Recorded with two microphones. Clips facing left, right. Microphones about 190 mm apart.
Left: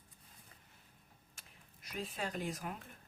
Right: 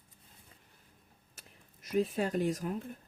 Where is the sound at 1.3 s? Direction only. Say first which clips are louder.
Right 6 dB; 40° right (ahead or behind).